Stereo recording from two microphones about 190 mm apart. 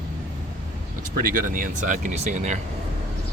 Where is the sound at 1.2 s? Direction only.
45° right (ahead or behind).